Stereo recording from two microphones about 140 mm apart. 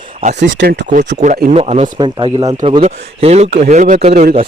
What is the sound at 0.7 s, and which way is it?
Speech, 65° right (ahead or behind).